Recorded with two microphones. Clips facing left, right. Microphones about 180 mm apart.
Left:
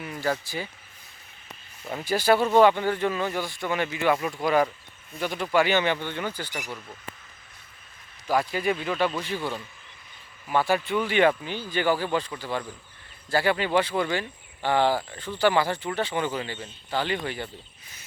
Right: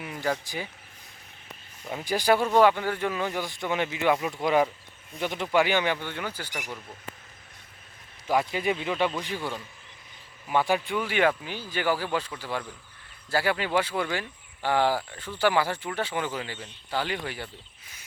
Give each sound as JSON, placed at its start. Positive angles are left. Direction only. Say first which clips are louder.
{"t": 0.0, "sound": "speech", "louder": "left 1 dB", "side_deg": -15}
{"t": 1.8, "sound": "speech", "louder": "left 1 dB", "side_deg": 0}
{"t": 2.0, "sound": "speech", "louder": "left 2 dB", "side_deg": -15}
{"t": 4.2, "sound": "speech", "louder": "left 1 dB", "side_deg": 0}
{"t": 5.2, "sound": "speech", "louder": "left 1 dB", "side_deg": -20}
{"t": 8.3, "sound": "speech", "louder": "left 1 dB", "side_deg": -20}
{"t": 10.5, "sound": "speech", "louder": "left 1 dB", "side_deg": -15}